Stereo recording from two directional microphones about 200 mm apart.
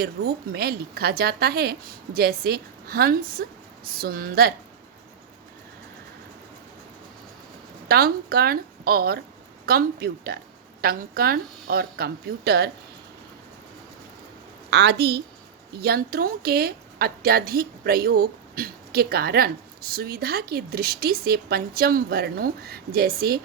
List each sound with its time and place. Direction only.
0.0 s a woman's voice: 50° right (ahead or behind)
7.9 s a woman's voice: 50° right (ahead or behind)
14.7 s a woman's voice: 55° right (ahead or behind)